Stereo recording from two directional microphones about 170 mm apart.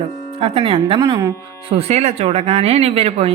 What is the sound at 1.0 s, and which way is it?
Speech, 20° right (ahead or behind).